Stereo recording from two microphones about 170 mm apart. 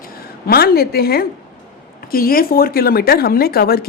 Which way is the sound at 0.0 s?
65° left (ahead or behind).